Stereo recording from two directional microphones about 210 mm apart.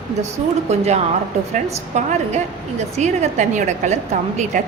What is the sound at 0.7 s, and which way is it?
A woman's voice, 30° right (ahead or behind).